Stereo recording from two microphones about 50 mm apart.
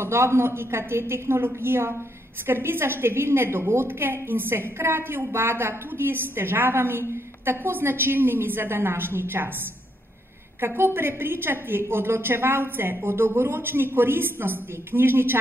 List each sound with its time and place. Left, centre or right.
0.0 s a woman's voice: right
10.6 s a woman's voice: right